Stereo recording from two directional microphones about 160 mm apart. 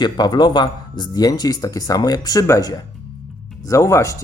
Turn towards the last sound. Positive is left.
turn(degrees=20)  # may be behind; listen again after turning